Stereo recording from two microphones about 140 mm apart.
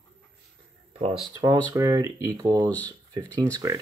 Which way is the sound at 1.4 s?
25° right (ahead or behind).